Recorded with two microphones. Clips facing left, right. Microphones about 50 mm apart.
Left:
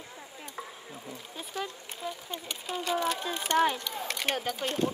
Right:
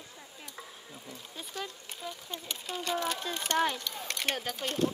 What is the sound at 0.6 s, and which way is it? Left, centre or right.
Speech, centre.